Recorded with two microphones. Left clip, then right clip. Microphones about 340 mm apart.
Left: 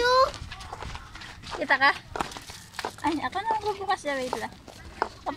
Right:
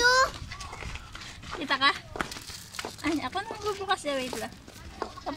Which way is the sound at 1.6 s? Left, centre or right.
Centre.